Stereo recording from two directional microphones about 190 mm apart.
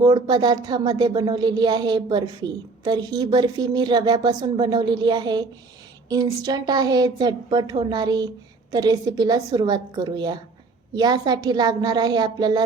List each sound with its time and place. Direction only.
0.0 s a woman's voice: 20° right (ahead or behind)